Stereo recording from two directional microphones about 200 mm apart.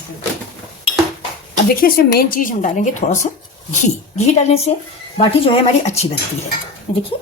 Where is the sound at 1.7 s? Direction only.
50° left (ahead or behind); by 5.9 s 30° left (ahead or behind).